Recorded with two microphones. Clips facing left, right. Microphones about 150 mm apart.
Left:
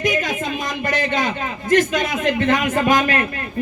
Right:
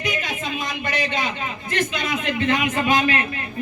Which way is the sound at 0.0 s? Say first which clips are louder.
Left 6 dB; 45° left (ahead or behind).